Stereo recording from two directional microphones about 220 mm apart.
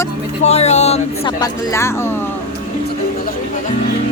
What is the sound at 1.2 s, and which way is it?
Speech, 20° left (ahead or behind).